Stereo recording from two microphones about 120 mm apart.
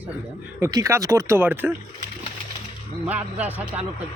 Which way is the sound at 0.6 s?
25° right (ahead or behind).